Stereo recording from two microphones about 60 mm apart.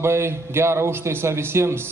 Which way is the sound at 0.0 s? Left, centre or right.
Right.